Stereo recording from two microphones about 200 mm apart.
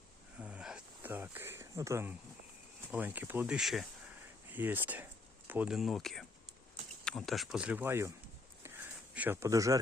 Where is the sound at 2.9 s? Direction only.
10° right (ahead or behind).